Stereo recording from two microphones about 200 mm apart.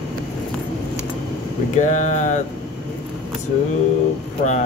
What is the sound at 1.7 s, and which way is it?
Speech, 35° left (ahead or behind).